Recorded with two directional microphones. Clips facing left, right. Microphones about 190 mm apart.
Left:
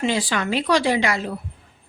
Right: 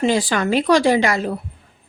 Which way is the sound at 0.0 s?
45° right (ahead or behind).